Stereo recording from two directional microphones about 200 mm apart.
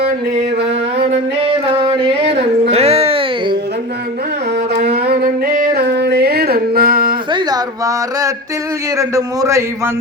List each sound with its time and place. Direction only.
2.6 s music: 30° right (ahead or behind)
4.9 s music: 50° right (ahead or behind)
7.3 s a sound: 20° right (ahead or behind)
9.0 s a man's voice: 15° right (ahead or behind)